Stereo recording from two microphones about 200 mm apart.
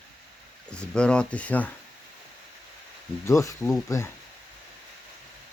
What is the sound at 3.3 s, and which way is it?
Speech, 15° left (ahead or behind).